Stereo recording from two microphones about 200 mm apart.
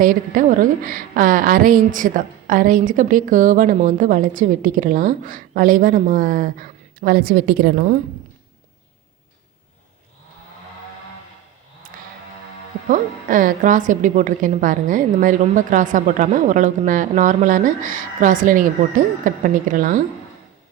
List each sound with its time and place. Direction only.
0.0 s a woman's voice: 45° right (ahead or behind)
11.9 s vehicle: 40° right (ahead or behind)
12.9 s a woman's voice: 40° right (ahead or behind)